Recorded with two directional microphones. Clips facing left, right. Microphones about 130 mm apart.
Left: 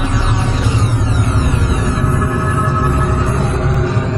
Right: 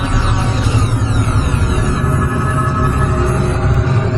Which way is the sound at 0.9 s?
Centre (ahead or behind).